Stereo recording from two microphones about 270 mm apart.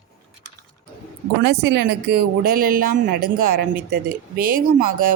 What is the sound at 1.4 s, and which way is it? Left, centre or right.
Speech, right.